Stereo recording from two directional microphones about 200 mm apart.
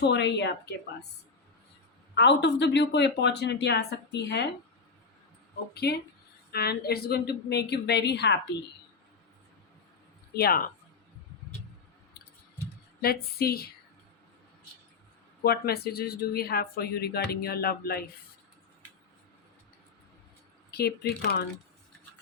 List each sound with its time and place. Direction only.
0.0 s speech: 60° left (ahead or behind)
2.1 s speech: 60° left (ahead or behind)
5.7 s speech: 55° left (ahead or behind)
10.3 s speech: 50° left (ahead or behind)
13.0 s speech: 50° left (ahead or behind)
15.4 s speech: 50° left (ahead or behind)
20.7 s speech: 55° left (ahead or behind)